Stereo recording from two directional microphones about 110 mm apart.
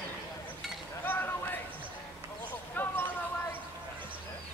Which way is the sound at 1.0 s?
15° left (ahead or behind).